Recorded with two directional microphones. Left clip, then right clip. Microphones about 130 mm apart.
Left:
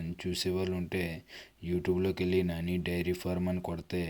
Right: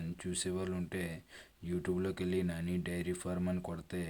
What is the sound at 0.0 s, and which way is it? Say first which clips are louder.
Speech: left 6 dB; 15° left (ahead or behind).